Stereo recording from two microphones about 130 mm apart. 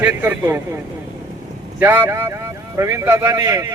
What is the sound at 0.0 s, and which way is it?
Speech, 15° right (ahead or behind).